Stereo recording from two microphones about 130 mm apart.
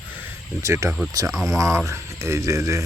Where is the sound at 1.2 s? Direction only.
Centre (ahead or behind).